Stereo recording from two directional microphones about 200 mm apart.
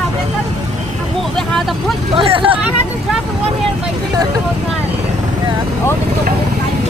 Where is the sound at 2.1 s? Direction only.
25° right (ahead or behind).